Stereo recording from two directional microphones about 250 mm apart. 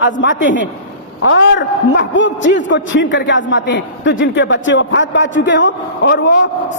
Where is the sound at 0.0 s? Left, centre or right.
Left.